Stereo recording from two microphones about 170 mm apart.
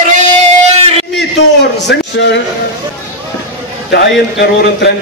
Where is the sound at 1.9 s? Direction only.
85° left.